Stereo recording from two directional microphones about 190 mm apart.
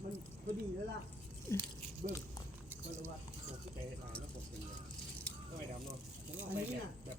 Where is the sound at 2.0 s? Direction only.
40° right (ahead or behind).